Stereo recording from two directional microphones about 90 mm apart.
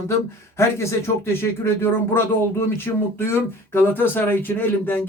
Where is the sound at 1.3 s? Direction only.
30° left (ahead or behind).